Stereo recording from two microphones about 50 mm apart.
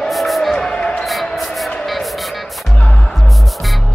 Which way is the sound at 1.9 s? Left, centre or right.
Centre.